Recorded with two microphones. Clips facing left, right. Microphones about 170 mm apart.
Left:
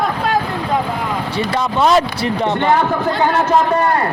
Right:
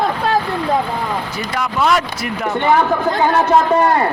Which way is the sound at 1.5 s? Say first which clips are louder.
Left 2 dB; 25° left (ahead or behind).